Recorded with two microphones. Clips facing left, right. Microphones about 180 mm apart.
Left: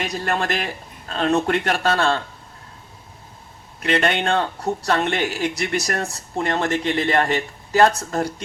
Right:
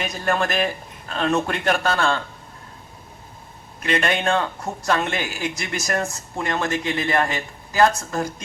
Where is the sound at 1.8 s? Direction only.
35° left (ahead or behind).